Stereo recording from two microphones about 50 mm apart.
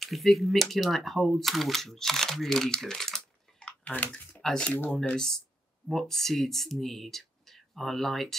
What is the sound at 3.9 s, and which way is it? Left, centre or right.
Speech, left.